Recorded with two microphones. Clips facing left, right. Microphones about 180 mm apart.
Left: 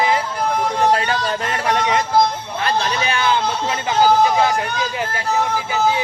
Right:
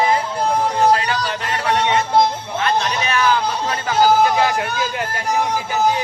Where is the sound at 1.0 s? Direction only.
35° left (ahead or behind).